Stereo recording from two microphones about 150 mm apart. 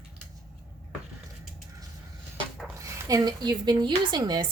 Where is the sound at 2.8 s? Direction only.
25° right (ahead or behind).